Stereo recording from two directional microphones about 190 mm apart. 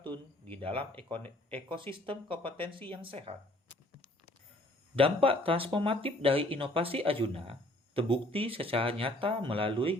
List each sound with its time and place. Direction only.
0.6 s speech: 30° right (ahead or behind)
4.9 s speech: 30° right (ahead or behind)